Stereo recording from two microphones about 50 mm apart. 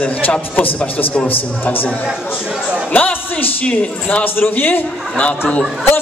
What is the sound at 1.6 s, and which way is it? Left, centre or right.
Speech, left.